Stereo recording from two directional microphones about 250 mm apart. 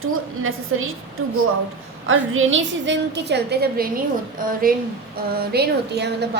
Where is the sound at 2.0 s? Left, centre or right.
Right.